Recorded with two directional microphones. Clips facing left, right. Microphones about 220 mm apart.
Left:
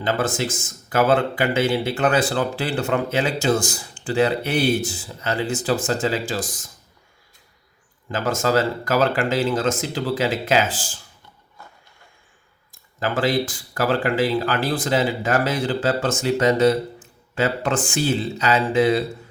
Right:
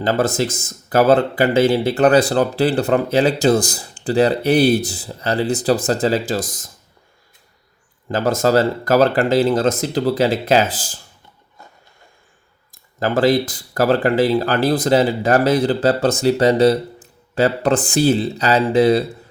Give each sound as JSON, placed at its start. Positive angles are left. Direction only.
{"t": 0.0, "sound": "speech", "side_deg": -40}
{"t": 8.1, "sound": "speech", "side_deg": -35}
{"t": 13.0, "sound": "speech", "side_deg": -40}